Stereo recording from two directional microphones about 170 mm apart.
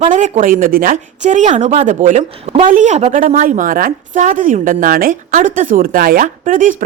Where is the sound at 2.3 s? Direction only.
35° right (ahead or behind).